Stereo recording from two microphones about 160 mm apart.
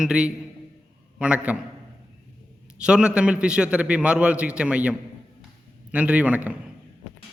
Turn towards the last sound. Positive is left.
turn(degrees=-10)  # may be behind; listen again after turning